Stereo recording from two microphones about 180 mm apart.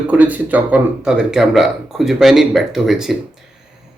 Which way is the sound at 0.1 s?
10° right (ahead or behind).